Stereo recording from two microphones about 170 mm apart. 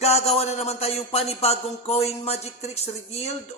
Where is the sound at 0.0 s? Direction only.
40° left (ahead or behind).